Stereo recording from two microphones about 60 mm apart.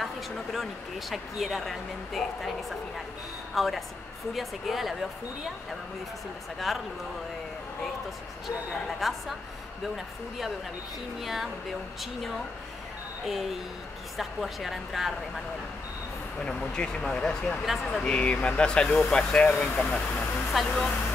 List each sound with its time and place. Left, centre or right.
0.0 s speech: centre
6.7 s speech: centre
9.0 s speech: centre
13.2 s speech: centre
16.3 s speech: centre
18.0 s speech: centre